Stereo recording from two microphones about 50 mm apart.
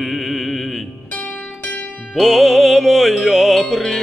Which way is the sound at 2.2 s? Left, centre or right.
Centre.